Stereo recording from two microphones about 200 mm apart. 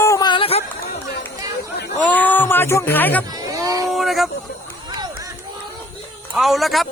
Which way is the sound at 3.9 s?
Centre (ahead or behind).